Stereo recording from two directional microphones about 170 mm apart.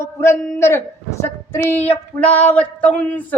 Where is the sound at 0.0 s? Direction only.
15° left (ahead or behind).